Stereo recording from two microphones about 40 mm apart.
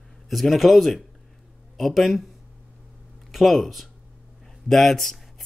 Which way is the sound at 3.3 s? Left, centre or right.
Centre.